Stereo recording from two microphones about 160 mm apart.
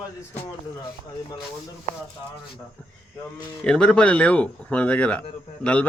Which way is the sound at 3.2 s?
5° left (ahead or behind).